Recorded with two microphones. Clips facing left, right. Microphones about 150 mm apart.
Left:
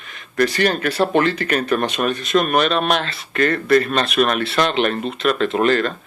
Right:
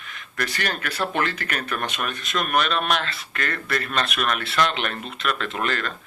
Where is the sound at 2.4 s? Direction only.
25° left (ahead or behind).